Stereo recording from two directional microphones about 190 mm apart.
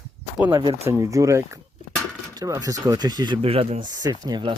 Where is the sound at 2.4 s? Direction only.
15° right (ahead or behind).